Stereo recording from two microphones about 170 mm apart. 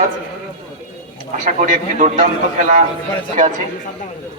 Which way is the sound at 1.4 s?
45° right (ahead or behind).